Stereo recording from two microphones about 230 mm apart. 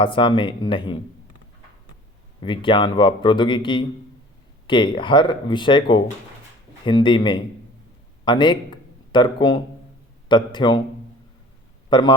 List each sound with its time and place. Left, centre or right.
0.0 s speech: left
2.4 s a man's voice: left
11.9 s speech: centre